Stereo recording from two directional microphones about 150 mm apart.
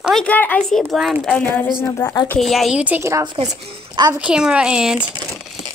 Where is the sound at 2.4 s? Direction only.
Centre (ahead or behind); by 4.1 s 25° right (ahead or behind).